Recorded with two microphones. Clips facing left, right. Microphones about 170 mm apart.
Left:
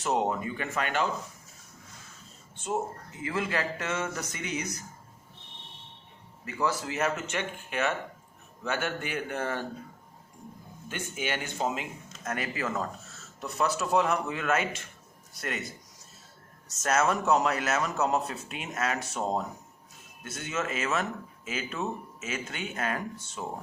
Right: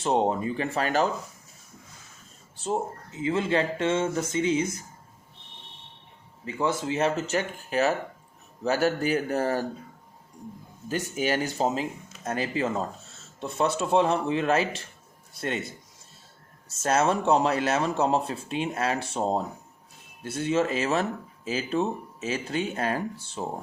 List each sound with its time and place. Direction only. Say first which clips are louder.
0.0 s speech: right 4 dB; 30° right (ahead or behind)
2.6 s a man's voice: right 3 dB; 30° right (ahead or behind)
6.4 s a man's voice: right 3 dB; 25° right (ahead or behind)
10.8 s a man's voice: right 7 dB; 35° right (ahead or behind)